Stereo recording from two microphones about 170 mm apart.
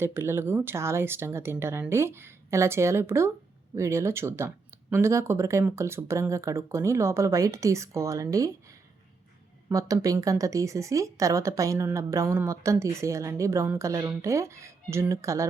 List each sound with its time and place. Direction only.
0.0 s speech: 15° right (ahead or behind)
9.6 s speech: 20° right (ahead or behind)